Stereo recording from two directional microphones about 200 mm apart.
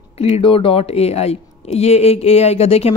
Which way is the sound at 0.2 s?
30° left (ahead or behind).